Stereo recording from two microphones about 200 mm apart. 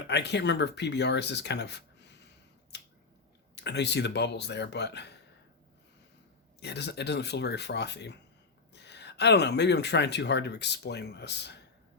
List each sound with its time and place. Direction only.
0.1 s speech: 60° left (ahead or behind)
2.7 s finger snapping: 55° left (ahead or behind)
3.5 s speech: 60° left (ahead or behind)
6.6 s speech: 55° left (ahead or behind)